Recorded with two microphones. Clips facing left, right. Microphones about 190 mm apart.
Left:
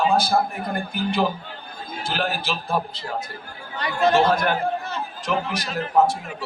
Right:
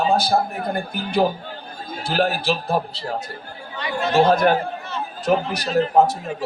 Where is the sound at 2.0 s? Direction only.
40° right (ahead or behind).